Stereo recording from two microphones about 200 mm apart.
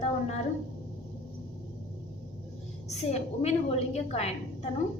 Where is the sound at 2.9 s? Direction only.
30° left (ahead or behind).